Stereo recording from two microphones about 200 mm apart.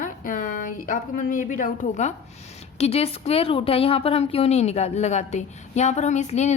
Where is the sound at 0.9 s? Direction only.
40° left (ahead or behind).